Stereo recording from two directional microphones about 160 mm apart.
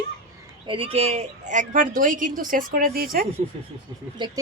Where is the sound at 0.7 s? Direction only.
35° right (ahead or behind); by 3.2 s 65° right (ahead or behind).